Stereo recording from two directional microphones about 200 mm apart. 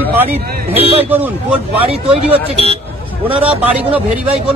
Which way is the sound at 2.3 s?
30° right (ahead or behind).